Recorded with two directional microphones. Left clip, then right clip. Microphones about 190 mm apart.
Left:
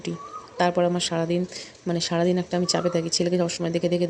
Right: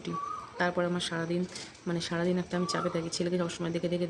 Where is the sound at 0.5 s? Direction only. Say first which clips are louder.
Left 9 dB; 25° left (ahead or behind).